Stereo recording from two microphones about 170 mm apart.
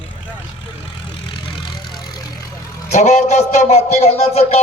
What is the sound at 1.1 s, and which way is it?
Vehicle, 30° left (ahead or behind).